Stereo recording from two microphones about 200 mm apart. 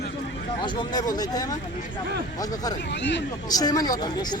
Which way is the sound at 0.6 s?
20° left (ahead or behind).